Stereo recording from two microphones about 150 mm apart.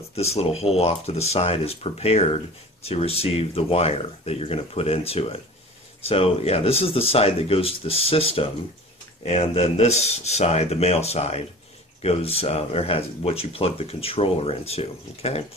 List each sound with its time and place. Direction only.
0.1 s speech: 45° left (ahead or behind)